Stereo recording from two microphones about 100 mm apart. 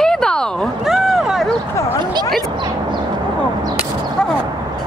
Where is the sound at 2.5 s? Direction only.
50° right (ahead or behind).